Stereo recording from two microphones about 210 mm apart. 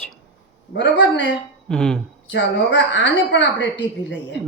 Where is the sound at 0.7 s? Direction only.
55° left (ahead or behind).